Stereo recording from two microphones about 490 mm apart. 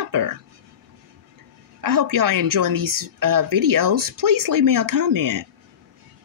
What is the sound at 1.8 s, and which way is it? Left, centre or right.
A woman's voice, right.